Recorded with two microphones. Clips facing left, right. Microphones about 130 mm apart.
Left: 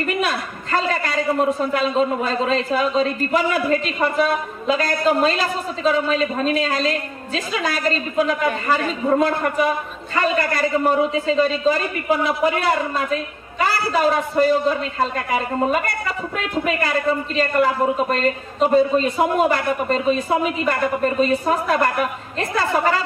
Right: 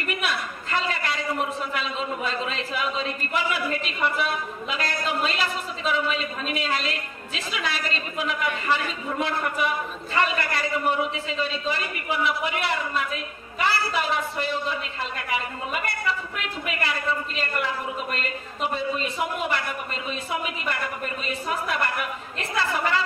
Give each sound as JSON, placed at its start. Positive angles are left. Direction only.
{"t": 0.2, "sound": "a man's voice", "side_deg": 40}
{"t": 18.1, "sound": "a man's voice", "side_deg": 40}